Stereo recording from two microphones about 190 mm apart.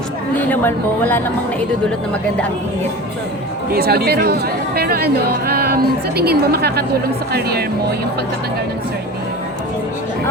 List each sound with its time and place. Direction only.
0.5 s speech: 10° left (ahead or behind)
3.7 s speech: 55° right (ahead or behind)